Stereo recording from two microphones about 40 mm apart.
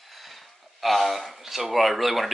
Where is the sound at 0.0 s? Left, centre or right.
Centre.